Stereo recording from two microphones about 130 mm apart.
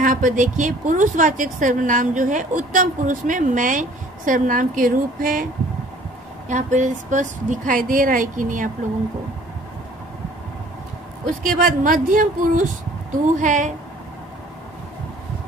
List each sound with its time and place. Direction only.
0.0 s a woman's voice: 85° right
6.5 s a woman's voice: 70° right (ahead or behind); by 8.6 s 90° right
11.2 s a woman's voice: 90° right
13.4 s a woman's voice: 70° right (ahead or behind)